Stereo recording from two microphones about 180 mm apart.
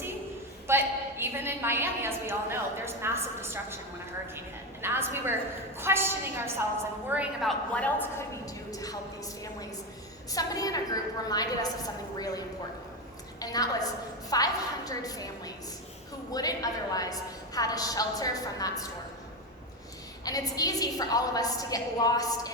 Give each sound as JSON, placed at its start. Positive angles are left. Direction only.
{"t": 0.7, "sound": "a woman's voice", "side_deg": -15}
{"t": 7.8, "sound": "a woman's voice", "side_deg": 10}
{"t": 8.4, "sound": "a man's voice", "side_deg": 20}
{"t": 10.3, "sound": "a woman's voice", "side_deg": 20}
{"t": 13.4, "sound": "a woman's voice", "side_deg": 20}
{"t": 20.2, "sound": "a woman's voice", "side_deg": 20}